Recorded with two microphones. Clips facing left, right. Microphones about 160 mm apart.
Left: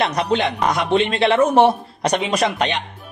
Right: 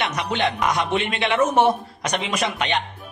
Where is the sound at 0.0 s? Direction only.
35° left (ahead or behind).